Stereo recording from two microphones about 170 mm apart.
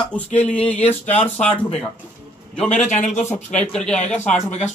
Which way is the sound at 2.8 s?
45° left (ahead or behind).